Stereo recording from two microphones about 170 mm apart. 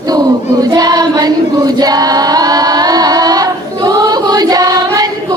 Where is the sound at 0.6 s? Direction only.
20° right (ahead or behind).